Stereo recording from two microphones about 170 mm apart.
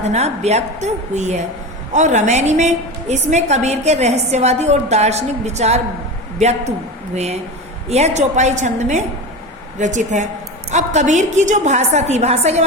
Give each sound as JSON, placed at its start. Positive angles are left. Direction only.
{"t": 0.0, "sound": "a woman's voice", "side_deg": -40}
{"t": 7.9, "sound": "a woman's voice", "side_deg": -40}